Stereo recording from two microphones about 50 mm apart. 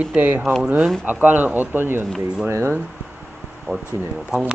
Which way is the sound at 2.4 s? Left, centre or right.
Right.